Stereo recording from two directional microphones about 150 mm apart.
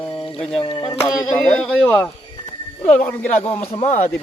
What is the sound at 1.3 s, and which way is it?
Speech, 10° left (ahead or behind).